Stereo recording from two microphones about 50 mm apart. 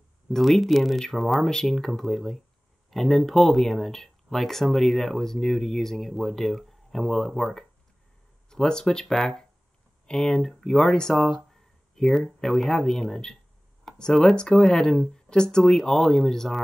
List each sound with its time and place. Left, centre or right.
0.3 s speech: centre
8.5 s speech: centre
10.3 s speech: centre